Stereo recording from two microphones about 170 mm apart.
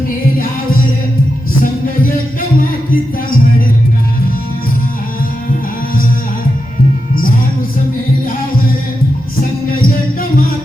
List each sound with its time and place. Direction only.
1.6 s music: 55° left (ahead or behind)
9.4 s music: 55° left (ahead or behind)